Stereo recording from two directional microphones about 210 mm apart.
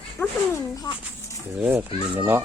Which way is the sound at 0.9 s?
20° left (ahead or behind).